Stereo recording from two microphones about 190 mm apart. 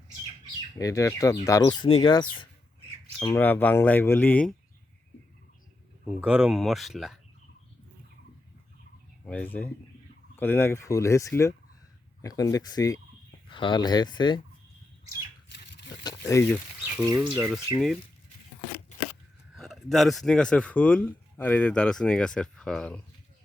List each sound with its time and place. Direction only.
0.8 s speech: 15° left (ahead or behind)
6.1 s speech: 5° right (ahead or behind)
9.2 s speech: 5° left (ahead or behind); by 14.4 s 25° left (ahead or behind)
15.8 s a sound: 65° left (ahead or behind)
16.0 s a sound: 15° left (ahead or behind)
17.3 s speech: centre (ahead or behind)
19.5 s speech: centre (ahead or behind)